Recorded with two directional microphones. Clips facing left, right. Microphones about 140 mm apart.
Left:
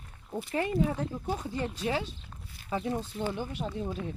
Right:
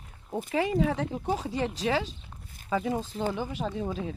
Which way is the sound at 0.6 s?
90° right.